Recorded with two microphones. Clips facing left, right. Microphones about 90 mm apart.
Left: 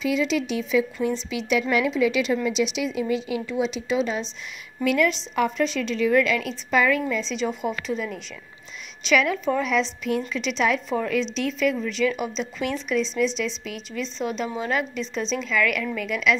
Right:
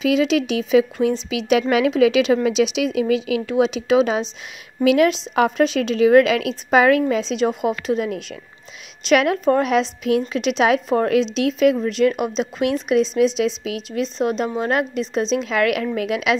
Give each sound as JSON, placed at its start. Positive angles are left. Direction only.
{"t": 0.0, "sound": "a woman's voice", "side_deg": -80}
{"t": 10.9, "sound": "a woman's voice", "side_deg": -55}
{"t": 11.8, "sound": "speech", "side_deg": -45}
{"t": 13.7, "sound": "a woman's voice", "side_deg": -65}
{"t": 14.0, "sound": "speech", "side_deg": -45}
{"t": 14.6, "sound": "a woman's voice", "side_deg": -55}